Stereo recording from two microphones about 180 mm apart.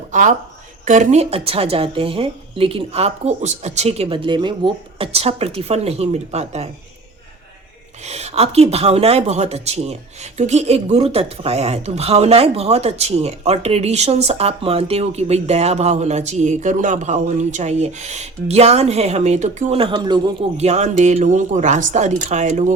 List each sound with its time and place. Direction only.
0.1 s speech: 45° right (ahead or behind)
8.0 s speech: 35° right (ahead or behind)